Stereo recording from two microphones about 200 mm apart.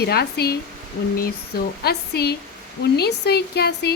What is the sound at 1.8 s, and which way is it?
Speech, 55° left (ahead or behind).